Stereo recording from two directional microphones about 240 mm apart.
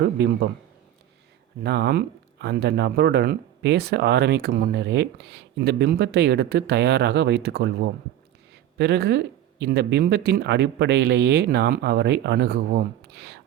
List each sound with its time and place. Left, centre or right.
0.0 s speech: right
1.6 s speech: right